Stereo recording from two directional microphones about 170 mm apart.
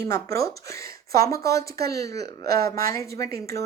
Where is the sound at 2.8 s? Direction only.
20° left (ahead or behind).